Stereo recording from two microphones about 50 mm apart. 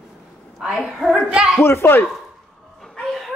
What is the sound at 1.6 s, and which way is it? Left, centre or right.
Speech, left.